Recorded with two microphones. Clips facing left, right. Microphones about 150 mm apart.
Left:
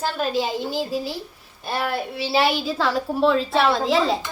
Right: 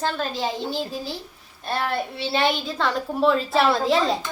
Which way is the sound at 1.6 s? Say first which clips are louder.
Even; 5° left (ahead or behind).